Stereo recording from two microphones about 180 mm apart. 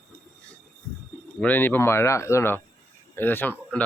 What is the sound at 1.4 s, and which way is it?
Speech, 10° left (ahead or behind).